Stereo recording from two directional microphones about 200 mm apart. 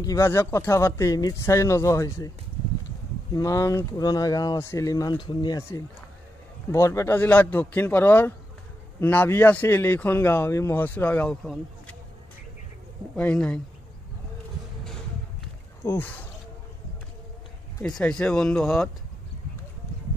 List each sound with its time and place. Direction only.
0.0 s speech: 15° left (ahead or behind)
3.3 s speech: 15° left (ahead or behind)
13.1 s speech: 5° left (ahead or behind)
15.8 s speech: 10° left (ahead or behind)
17.8 s speech: 5° left (ahead or behind)